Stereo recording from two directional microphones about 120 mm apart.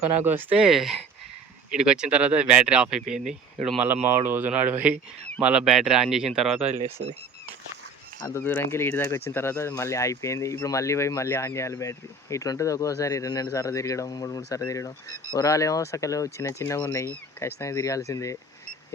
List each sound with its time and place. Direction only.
0.3 s speech: 15° right (ahead or behind)
0.7 s speech: centre (ahead or behind)
4.0 s speech: 15° right (ahead or behind)
8.3 s speech: 15° left (ahead or behind)